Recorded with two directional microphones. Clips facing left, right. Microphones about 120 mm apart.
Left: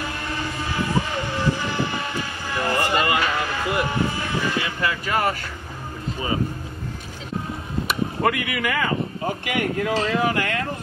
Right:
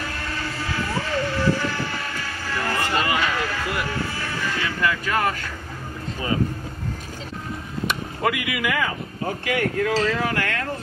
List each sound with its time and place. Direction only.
0.3 s train: 15° left (ahead or behind)
3.6 s vehicle: 20° left (ahead or behind)
7.8 s speech: centre (ahead or behind)
9.2 s speech: 15° left (ahead or behind)